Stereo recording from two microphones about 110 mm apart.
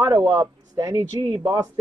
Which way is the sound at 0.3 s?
35° right (ahead or behind).